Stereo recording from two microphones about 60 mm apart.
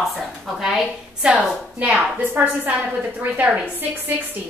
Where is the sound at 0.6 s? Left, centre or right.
Centre.